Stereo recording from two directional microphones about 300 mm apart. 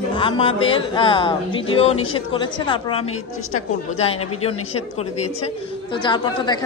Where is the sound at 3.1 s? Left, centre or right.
Left.